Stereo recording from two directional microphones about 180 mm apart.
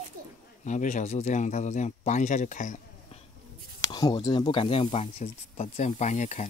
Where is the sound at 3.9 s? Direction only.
20° left (ahead or behind); by 6.4 s 40° left (ahead or behind).